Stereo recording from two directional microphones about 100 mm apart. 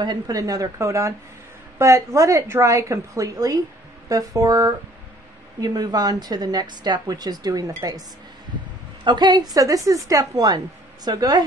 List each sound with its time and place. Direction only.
0.0 s a woman's voice: 45° right (ahead or behind)
9.0 s a woman's voice: 50° right (ahead or behind)